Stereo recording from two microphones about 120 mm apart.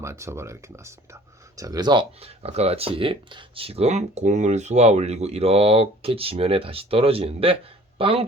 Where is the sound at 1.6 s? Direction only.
35° right (ahead or behind).